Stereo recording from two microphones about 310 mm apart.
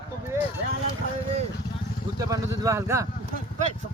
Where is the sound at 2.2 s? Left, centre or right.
Centre.